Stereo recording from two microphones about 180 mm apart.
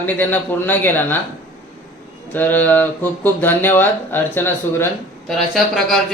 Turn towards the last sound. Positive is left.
turn(degrees=0)  # may be behind; listen again after turning